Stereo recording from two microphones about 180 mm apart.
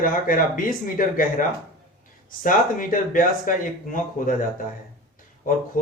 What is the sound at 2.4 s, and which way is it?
Speech, 50° left (ahead or behind).